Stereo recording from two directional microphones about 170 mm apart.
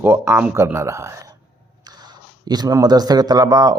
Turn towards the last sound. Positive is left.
turn(degrees=-25)  # may be behind; listen again after turning